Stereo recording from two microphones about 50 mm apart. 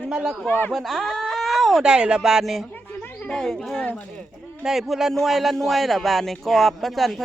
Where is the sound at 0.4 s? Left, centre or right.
Left.